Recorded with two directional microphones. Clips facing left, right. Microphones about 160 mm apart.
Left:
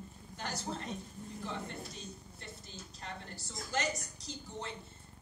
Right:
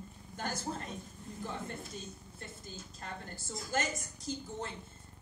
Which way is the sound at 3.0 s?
50° right (ahead or behind).